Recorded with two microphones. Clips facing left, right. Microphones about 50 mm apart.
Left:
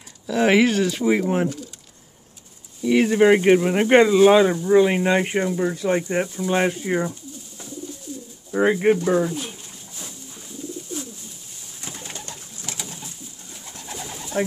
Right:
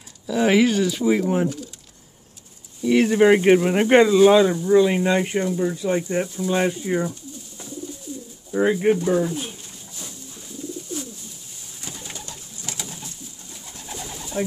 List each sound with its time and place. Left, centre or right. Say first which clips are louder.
0.3 s speech: even; left
2.8 s speech: even; centre
3.9 s speech: even; centre
4.3 s speech: even; left
8.5 s speech: left 1 dB; left
11.8 s bird: left 1 dB; left
13.9 s bird: even; centre